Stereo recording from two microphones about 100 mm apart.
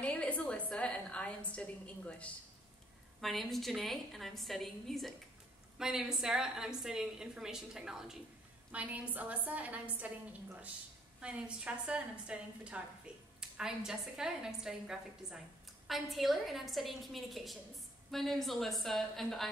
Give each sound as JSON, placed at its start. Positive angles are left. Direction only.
{"t": 0.0, "sound": "a woman's voice", "side_deg": 15}
{"t": 3.2, "sound": "a woman's voice", "side_deg": 0}